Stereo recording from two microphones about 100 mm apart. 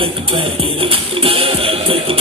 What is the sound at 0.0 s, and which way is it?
Music, 65° right (ahead or behind).